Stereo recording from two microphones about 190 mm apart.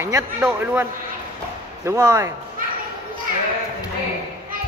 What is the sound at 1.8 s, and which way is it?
Speech, 20° right (ahead or behind).